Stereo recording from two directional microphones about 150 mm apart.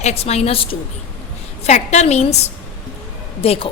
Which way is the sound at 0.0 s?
45° left (ahead or behind).